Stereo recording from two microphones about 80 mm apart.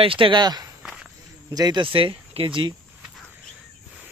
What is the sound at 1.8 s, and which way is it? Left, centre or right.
Speech, right.